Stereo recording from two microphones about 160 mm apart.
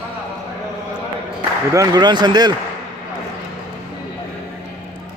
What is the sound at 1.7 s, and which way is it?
Speech, 25° right (ahead or behind).